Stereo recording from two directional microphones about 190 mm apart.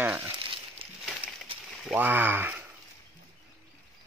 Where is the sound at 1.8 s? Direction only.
5° right (ahead or behind).